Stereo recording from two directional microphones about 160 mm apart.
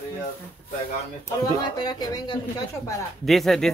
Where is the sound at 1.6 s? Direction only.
25° left (ahead or behind).